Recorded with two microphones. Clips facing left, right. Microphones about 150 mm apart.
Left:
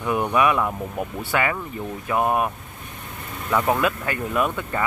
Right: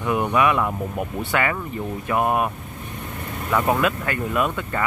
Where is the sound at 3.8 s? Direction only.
20° left (ahead or behind).